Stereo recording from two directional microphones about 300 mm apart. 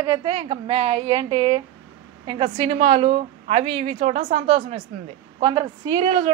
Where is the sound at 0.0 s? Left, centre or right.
Centre.